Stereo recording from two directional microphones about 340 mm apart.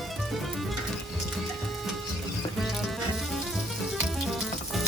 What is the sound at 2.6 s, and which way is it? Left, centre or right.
Music, centre.